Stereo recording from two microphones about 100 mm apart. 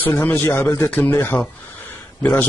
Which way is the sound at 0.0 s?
20° left (ahead or behind).